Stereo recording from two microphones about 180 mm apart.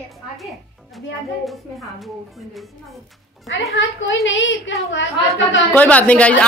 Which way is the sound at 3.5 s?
90° left.